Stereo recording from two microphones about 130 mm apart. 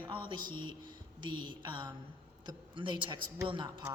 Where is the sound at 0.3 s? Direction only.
35° right (ahead or behind).